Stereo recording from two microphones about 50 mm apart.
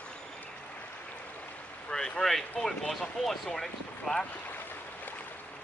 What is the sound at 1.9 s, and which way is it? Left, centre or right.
Speech, centre.